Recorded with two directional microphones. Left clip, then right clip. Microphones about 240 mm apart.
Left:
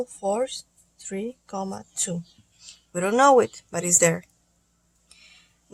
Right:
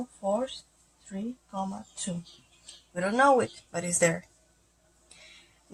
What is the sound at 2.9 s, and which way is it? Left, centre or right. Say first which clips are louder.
A woman's voice: left 5 dB; left.